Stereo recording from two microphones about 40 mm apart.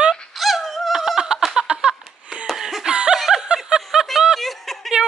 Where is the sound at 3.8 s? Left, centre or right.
Centre.